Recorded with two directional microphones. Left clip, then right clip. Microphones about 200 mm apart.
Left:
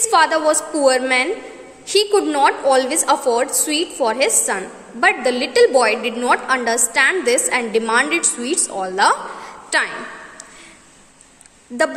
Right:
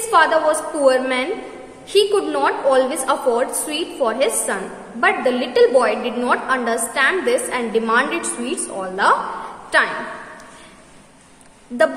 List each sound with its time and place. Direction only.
0.1 s a woman's voice: 40° left (ahead or behind)